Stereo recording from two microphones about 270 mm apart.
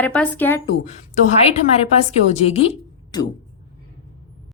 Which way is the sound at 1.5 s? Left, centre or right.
Left.